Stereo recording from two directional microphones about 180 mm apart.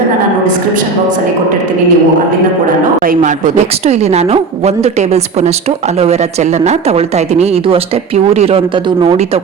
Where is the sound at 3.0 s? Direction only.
45° right (ahead or behind).